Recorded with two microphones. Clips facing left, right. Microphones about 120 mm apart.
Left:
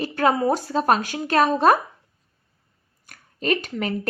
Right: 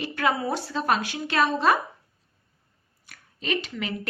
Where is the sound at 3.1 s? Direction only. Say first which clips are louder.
Left 6 dB; 45° left (ahead or behind).